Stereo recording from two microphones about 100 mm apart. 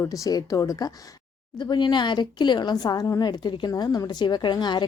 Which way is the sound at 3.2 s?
45° left (ahead or behind).